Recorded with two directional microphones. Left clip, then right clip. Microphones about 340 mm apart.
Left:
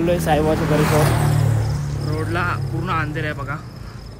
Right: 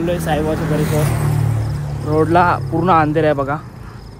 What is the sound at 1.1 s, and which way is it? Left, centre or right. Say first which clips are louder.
Music: left 1 dB; left.